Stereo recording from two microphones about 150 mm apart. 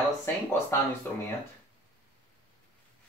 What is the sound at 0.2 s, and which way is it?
Speech, 20° left (ahead or behind).